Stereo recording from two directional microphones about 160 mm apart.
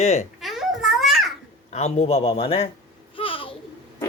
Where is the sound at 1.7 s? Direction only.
40° left (ahead or behind).